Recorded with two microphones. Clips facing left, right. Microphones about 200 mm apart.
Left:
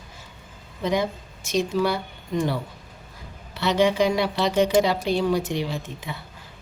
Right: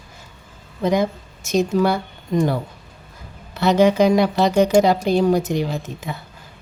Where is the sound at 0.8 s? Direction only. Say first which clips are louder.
Right 5 dB; 45° right (ahead or behind).